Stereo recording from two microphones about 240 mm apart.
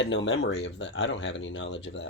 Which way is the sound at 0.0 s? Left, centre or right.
Left.